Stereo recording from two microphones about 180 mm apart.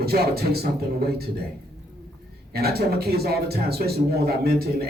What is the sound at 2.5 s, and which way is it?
Speech, 60° right (ahead or behind).